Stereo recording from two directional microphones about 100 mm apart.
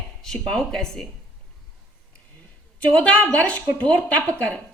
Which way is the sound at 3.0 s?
15° left (ahead or behind).